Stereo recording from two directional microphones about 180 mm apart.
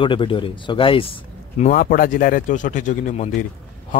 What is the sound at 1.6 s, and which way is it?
Speech, 50° left (ahead or behind).